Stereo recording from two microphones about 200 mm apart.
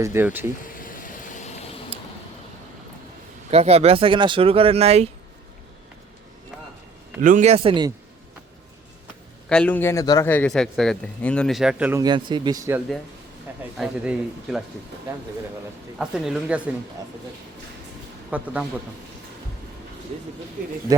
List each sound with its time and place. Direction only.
0.0 s speech: 10° right (ahead or behind)
0.6 s vehicle: 45° left (ahead or behind)
3.5 s speech: 30° right (ahead or behind)
7.2 s speech: 40° right (ahead or behind); by 7.9 s 25° right (ahead or behind)
9.5 s a man's voice: 5° left (ahead or behind)
12.0 s speech: 20° right (ahead or behind)
13.7 s a man's voice: 5° right (ahead or behind)
16.0 s a man's voice: 5° right (ahead or behind)
18.3 s speech: 5° right (ahead or behind)